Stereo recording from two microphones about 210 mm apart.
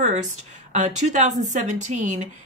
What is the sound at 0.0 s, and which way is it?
A woman's voice, 35° right (ahead or behind).